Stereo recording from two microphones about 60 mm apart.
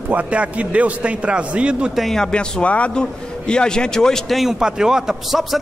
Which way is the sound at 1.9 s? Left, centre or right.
Centre.